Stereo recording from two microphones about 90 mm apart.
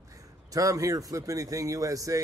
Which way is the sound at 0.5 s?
40° right (ahead or behind).